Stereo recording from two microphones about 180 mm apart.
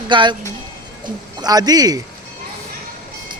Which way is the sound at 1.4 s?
20° right (ahead or behind).